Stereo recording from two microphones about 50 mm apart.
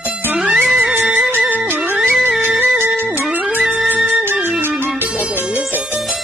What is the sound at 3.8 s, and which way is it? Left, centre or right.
Music, right.